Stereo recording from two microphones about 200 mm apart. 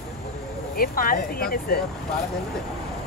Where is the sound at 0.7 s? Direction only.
45° left (ahead or behind).